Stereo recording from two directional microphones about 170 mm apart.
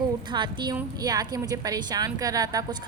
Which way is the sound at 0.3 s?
25° right (ahead or behind).